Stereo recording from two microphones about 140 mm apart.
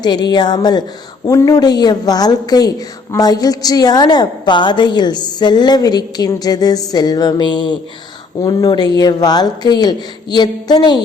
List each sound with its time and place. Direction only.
0.0 s speech: 30° left (ahead or behind)